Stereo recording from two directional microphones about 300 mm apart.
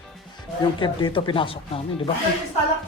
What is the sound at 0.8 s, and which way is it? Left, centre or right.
Speech, centre.